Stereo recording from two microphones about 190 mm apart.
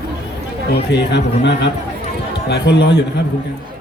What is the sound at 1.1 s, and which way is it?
A man's voice, 65° left (ahead or behind).